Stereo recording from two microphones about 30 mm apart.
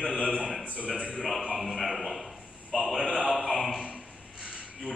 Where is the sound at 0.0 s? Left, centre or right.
Right.